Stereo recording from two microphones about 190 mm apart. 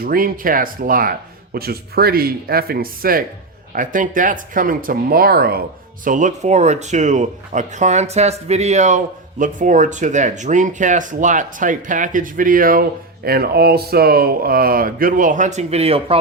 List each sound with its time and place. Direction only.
0.0 s speech: 50° right (ahead or behind)
6.1 s speech: 40° right (ahead or behind)